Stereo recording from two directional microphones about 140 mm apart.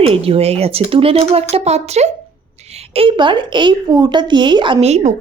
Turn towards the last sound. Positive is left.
turn(degrees=-50)  # may be behind; listen again after turning